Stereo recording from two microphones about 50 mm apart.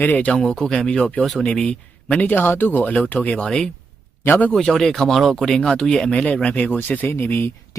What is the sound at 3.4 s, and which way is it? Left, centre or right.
Speech, centre.